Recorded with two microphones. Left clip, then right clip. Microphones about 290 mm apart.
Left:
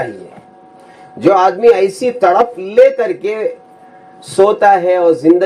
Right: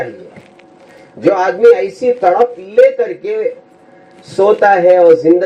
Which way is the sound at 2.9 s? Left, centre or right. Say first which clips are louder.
Even; left.